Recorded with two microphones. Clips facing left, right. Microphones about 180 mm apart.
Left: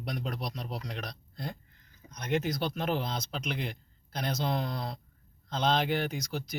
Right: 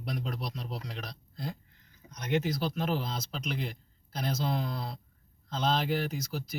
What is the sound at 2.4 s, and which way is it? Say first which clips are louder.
Speech: even; 5° right (ahead or behind).